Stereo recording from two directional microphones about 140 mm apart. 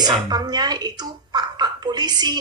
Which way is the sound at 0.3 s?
30° right (ahead or behind).